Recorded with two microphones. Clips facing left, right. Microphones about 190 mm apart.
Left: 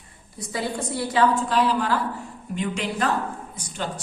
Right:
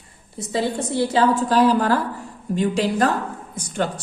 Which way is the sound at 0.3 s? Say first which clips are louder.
Right 5 dB; 25° right (ahead or behind).